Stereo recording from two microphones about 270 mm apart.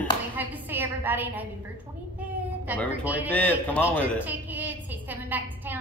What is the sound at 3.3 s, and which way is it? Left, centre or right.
Speech, centre.